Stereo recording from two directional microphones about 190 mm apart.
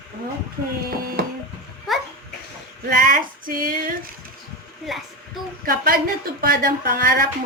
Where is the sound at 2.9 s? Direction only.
50° right (ahead or behind).